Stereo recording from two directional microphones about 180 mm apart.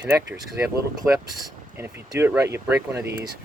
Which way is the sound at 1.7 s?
10° right (ahead or behind).